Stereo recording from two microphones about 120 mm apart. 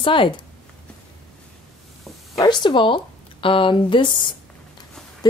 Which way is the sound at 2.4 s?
40° left (ahead or behind).